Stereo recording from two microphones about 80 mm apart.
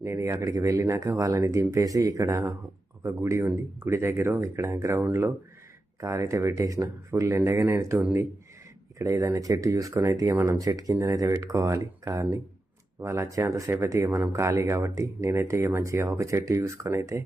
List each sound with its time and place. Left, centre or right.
0.0 s speech: right
9.0 s speech: right